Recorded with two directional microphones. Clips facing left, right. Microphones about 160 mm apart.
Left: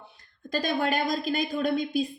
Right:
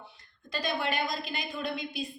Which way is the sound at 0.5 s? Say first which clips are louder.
Left 5 dB; 45° left (ahead or behind).